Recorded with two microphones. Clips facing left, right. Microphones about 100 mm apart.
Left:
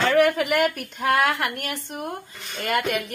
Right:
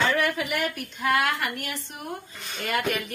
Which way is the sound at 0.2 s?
55° left (ahead or behind).